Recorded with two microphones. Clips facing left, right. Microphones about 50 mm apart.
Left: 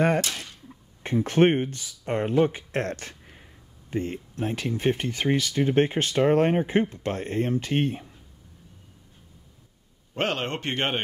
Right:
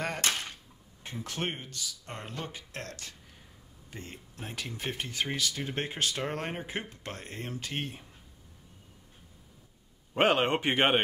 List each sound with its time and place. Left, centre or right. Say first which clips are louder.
0.2 s a sound: left 1 dB; right
1.0 s speech: left 15 dB; left
10.1 s speech: right 3 dB; centre